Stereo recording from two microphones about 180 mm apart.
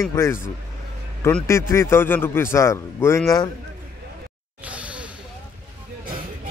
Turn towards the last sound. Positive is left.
turn(degrees=-5)  # may be behind; listen again after turning